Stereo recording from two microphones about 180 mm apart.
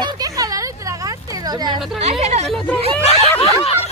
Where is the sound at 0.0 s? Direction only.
20° right (ahead or behind).